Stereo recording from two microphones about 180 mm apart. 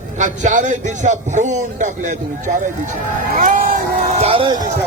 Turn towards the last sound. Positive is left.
turn(degrees=-30)  # may be behind; listen again after turning